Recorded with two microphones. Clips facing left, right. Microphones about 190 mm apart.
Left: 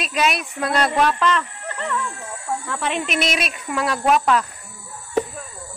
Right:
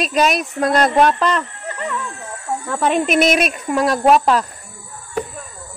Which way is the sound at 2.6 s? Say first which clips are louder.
Right 11 dB; 45° right (ahead or behind).